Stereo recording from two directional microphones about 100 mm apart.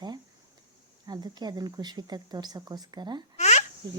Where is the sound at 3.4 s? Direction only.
90° left.